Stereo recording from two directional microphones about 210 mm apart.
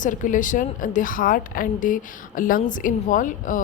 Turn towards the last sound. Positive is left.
turn(degrees=40)  # may be behind; listen again after turning